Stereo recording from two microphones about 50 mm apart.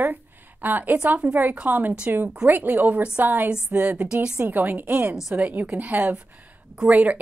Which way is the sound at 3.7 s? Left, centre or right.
Right.